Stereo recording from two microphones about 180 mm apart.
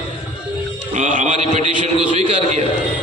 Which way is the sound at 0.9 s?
45° right (ahead or behind).